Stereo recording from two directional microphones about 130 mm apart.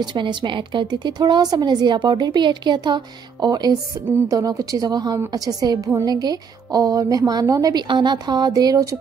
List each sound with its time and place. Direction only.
0.0 s a woman's voice: 35° right (ahead or behind)